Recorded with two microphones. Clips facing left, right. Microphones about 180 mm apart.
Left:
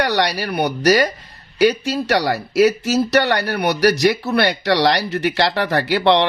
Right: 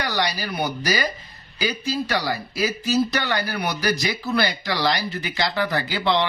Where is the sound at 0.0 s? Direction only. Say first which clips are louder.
Left 6 dB; 70° left (ahead or behind).